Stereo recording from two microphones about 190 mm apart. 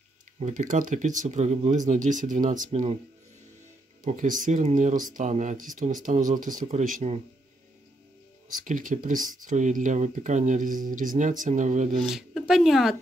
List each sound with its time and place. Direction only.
0.4 s speech: 40° right (ahead or behind)
4.0 s speech: 45° right (ahead or behind)
8.5 s speech: 45° right (ahead or behind)
12.0 s speech: centre (ahead or behind)